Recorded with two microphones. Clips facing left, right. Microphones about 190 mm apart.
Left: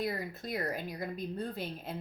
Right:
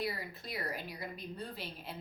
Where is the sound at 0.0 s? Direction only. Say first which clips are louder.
Left 4 dB; 45° left (ahead or behind).